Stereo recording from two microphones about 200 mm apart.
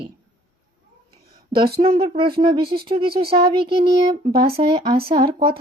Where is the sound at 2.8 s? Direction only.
25° right (ahead or behind).